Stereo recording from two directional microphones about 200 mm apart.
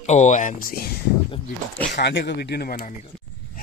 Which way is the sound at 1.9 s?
60° left (ahead or behind).